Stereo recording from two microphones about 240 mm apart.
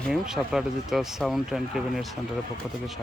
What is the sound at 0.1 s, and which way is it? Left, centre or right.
Speech, centre.